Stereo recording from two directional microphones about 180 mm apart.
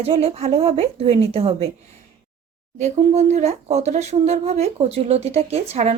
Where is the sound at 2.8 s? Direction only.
40° right (ahead or behind).